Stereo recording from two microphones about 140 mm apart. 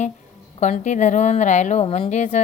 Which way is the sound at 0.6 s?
60° left (ahead or behind).